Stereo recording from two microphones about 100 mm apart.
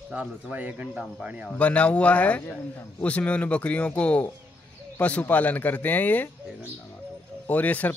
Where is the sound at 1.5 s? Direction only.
15° left (ahead or behind).